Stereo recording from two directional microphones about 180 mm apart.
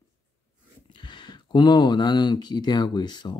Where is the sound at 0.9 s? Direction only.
25° left (ahead or behind).